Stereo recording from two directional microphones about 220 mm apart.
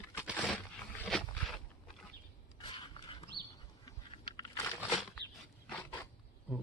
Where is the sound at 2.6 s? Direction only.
20° left (ahead or behind).